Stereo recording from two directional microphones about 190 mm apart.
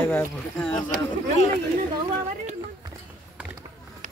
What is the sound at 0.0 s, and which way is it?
Speech, 10° left (ahead or behind).